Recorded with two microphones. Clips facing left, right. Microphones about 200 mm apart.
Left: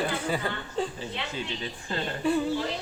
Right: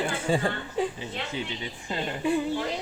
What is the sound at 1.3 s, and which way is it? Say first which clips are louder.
Speech: right 1 dB; 15° right (ahead or behind).